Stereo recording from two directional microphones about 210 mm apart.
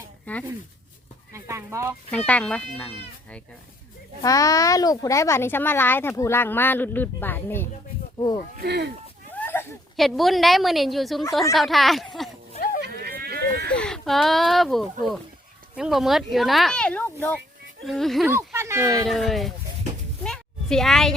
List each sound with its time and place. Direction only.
0.3 s speech: 5° left (ahead or behind)
1.3 s speech: 15° right (ahead or behind)
2.0 s speech: 5° left (ahead or behind)
8.5 s speech: 50° right (ahead or behind)
9.4 s a sound: 10° left (ahead or behind)
10.0 s speech: centre (ahead or behind)
12.8 s a sound: 45° right (ahead or behind)
13.7 s speech: 5° left (ahead or behind)
18.3 s speech: 10° right (ahead or behind)
19.0 s speech: centre (ahead or behind)
20.2 s a sound: 5° left (ahead or behind)